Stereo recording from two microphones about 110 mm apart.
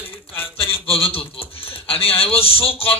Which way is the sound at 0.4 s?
60° left (ahead or behind).